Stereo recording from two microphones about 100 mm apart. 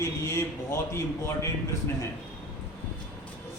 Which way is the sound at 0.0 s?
30° left (ahead or behind).